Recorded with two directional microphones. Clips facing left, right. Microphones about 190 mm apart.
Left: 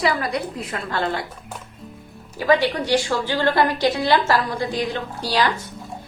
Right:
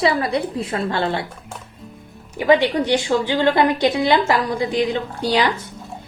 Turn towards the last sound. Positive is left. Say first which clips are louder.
# right 3 dB
turn(degrees=-20)  # may be behind; listen again after turning